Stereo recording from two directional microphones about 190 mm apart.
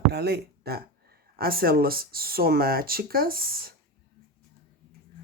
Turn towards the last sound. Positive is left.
turn(degrees=-50)  # may be behind; listen again after turning